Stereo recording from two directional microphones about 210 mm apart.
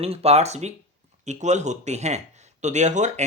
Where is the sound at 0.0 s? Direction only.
30° right (ahead or behind).